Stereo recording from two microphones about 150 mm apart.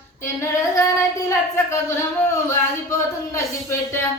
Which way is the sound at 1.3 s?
15° left (ahead or behind).